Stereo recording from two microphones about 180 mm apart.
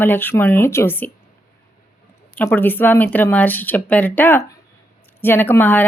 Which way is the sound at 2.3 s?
10° left (ahead or behind).